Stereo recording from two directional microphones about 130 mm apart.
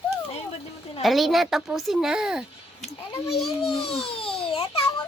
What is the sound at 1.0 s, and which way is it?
Speech, centre (ahead or behind).